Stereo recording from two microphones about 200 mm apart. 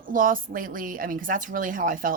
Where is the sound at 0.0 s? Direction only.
45° right (ahead or behind).